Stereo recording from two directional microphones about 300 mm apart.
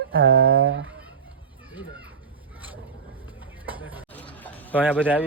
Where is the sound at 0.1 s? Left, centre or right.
Right.